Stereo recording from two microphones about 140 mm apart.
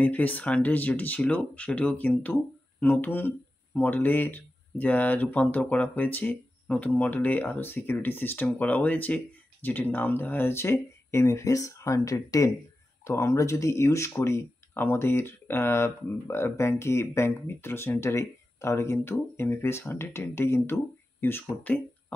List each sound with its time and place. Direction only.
0.0 s speech: 10° left (ahead or behind)